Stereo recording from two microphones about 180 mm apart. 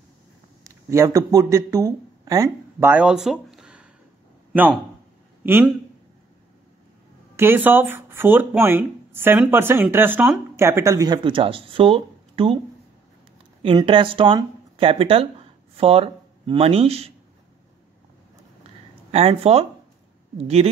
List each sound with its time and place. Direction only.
0.7 s speech: 15° right (ahead or behind)
5.4 s speech: 10° right (ahead or behind)
7.3 s speech: 10° right (ahead or behind); by 12.5 s 30° right (ahead or behind)
13.6 s speech: 30° right (ahead or behind)
19.1 s speech: 35° right (ahead or behind)